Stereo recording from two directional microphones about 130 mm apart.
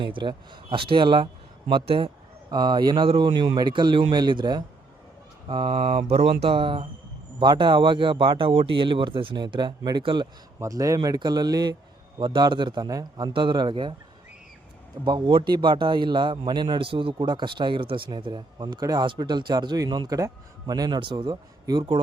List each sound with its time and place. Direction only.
0.0 s a man's voice: 35° right (ahead or behind)
10.6 s a man's voice: 25° right (ahead or behind)
15.0 s a man's voice: 40° right (ahead or behind)